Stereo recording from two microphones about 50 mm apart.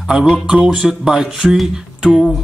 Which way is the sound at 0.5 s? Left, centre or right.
Centre.